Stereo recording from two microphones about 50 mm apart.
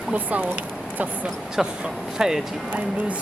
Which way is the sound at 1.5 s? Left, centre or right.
Centre.